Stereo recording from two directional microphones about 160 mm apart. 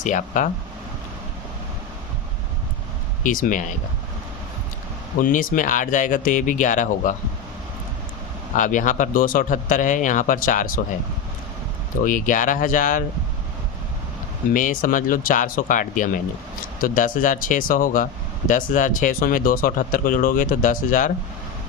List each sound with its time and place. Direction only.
0.0 s speech: 50° left (ahead or behind)
3.2 s speech: 55° left (ahead or behind)
5.2 s speech: 60° left (ahead or behind)
8.5 s speech: 55° left (ahead or behind)
12.0 s speech: 55° left (ahead or behind)
14.5 s speech: 55° left (ahead or behind)